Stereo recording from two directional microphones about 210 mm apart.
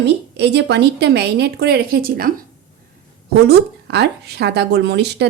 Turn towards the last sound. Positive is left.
turn(degrees=-55)  # may be behind; listen again after turning